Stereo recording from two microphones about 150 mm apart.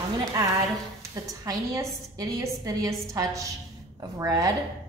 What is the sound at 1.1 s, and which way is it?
A woman's voice, 20° right (ahead or behind).